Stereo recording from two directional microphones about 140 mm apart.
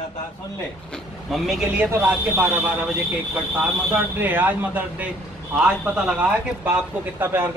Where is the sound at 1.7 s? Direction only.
15° right (ahead or behind).